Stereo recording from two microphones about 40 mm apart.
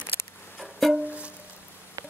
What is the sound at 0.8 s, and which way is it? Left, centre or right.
Music, centre.